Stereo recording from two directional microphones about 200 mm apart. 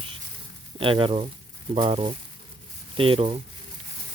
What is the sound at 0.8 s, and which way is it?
Speech, 25° right (ahead or behind).